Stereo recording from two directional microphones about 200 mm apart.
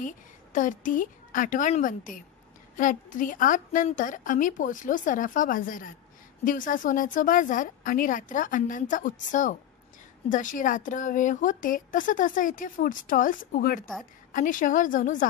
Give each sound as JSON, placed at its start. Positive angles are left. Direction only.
{"t": 0.0, "sound": "a woman's voice", "side_deg": 40}